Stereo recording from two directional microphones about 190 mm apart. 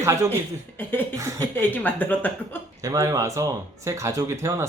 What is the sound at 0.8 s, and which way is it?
Speech, 10° left (ahead or behind).